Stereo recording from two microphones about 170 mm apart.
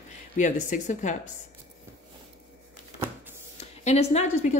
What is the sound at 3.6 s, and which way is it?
A woman's voice, 40° left (ahead or behind).